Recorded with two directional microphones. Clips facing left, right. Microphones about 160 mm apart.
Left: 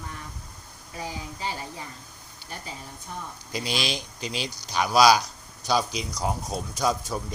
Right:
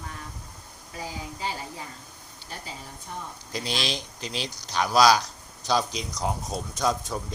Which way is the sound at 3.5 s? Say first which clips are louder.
Left 1 dB; 5° left (ahead or behind).